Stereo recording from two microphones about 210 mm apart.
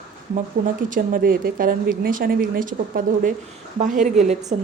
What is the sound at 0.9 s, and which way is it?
A woman's voice, 40° right (ahead or behind).